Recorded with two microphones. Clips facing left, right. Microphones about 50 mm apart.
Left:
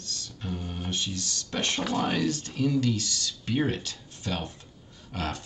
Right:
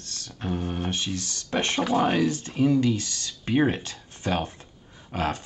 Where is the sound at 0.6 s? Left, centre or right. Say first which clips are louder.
Right 7 dB; right.